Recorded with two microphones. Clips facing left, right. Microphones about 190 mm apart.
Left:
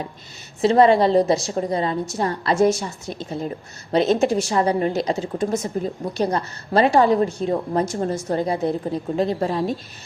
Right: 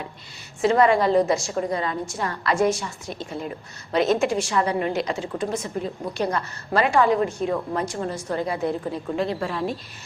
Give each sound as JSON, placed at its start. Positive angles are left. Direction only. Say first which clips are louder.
{"t": 0.6, "sound": "a woman's voice", "louder": "left 3 dB", "side_deg": 30}
{"t": 4.1, "sound": "a woman's voice", "louder": "left 3 dB", "side_deg": 35}